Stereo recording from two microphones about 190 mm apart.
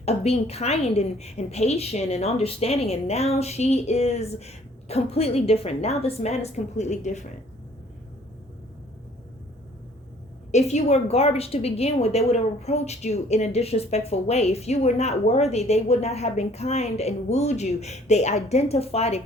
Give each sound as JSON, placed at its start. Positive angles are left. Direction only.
{"t": 0.0, "sound": "a woman's voice", "side_deg": 35}
{"t": 10.5, "sound": "a woman's voice", "side_deg": 35}